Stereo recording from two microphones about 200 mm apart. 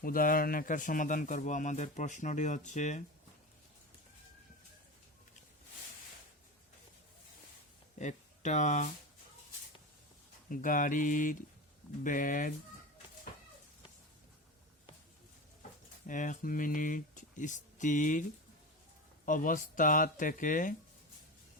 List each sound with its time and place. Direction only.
0.0 s speech: 45° left (ahead or behind)
7.9 s speech: 35° left (ahead or behind)
10.5 s speech: 40° left (ahead or behind)
16.0 s speech: 40° left (ahead or behind)